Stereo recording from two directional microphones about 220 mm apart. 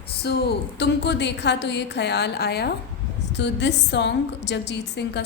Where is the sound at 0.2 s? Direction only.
50° left (ahead or behind).